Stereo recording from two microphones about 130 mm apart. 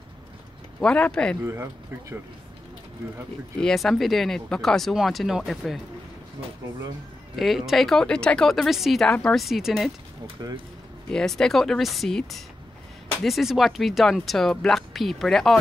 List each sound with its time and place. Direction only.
0.7 s speech: 5° left (ahead or behind)
1.4 s speech: 20° right (ahead or behind)
3.6 s speech: centre (ahead or behind)
7.3 s speech: centre (ahead or behind)
10.4 s speech: 30° right (ahead or behind)
11.1 s speech: 5° left (ahead or behind)